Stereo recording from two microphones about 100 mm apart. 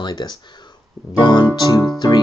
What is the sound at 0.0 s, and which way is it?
Speech, 45° left (ahead or behind).